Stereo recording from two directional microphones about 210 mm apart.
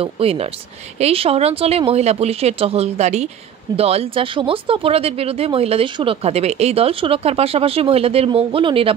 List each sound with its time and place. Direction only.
0.0 s speech: 30° right (ahead or behind)